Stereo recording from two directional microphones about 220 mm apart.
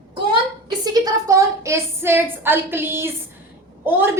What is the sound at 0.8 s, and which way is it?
A woman's voice, 15° right (ahead or behind).